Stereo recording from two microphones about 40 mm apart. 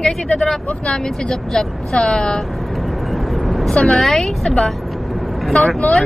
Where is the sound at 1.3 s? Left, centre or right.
Centre.